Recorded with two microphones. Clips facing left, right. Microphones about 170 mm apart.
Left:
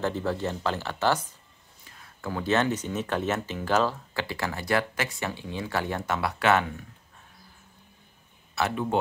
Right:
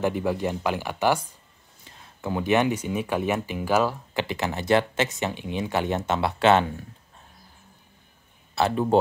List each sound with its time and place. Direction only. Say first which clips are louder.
0.0 s speech: right 3 dB; 15° right (ahead or behind)
8.5 s speech: right 6 dB; 30° right (ahead or behind)